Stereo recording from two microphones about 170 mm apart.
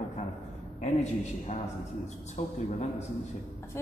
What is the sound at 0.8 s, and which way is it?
A man's voice, 40° left (ahead or behind).